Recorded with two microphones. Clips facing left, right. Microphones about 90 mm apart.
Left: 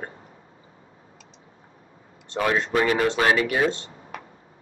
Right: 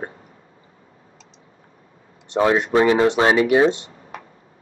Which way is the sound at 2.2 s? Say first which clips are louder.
Right 6 dB; 25° right (ahead or behind).